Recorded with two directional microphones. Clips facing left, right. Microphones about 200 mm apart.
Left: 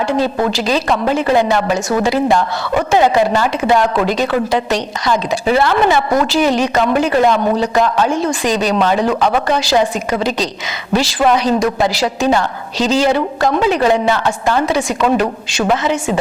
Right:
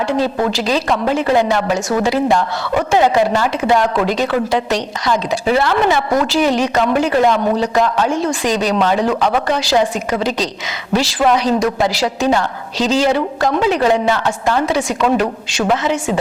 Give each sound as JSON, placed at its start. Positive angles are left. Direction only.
{"t": 0.5, "sound": "a woman's voice", "side_deg": 15}
{"t": 13.4, "sound": "a woman's voice", "side_deg": 20}